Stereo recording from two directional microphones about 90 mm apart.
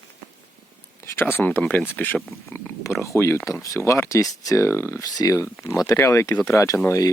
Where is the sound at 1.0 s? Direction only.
25° left (ahead or behind).